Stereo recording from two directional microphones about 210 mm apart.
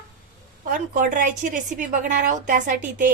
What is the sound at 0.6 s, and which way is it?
A woman's voice, 40° right (ahead or behind).